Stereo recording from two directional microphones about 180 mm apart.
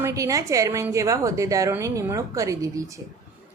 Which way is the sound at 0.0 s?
15° right (ahead or behind).